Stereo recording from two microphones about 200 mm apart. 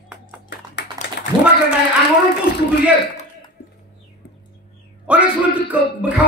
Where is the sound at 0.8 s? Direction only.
60° left (ahead or behind).